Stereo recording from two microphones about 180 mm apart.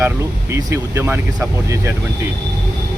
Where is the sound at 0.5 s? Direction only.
15° right (ahead or behind).